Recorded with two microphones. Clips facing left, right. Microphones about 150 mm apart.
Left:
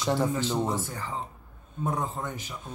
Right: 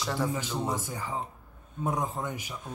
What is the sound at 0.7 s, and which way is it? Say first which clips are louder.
Speech: left 1 dB; 10° right (ahead or behind).